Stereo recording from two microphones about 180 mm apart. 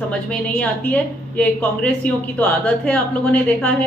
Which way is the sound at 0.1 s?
5° left (ahead or behind).